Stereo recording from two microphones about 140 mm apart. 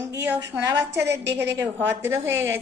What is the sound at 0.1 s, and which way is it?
A woman's voice, 20° right (ahead or behind).